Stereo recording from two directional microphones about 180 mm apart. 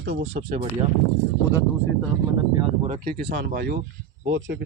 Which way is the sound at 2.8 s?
50° right (ahead or behind).